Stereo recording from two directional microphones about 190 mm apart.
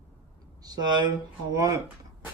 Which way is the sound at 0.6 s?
20° right (ahead or behind).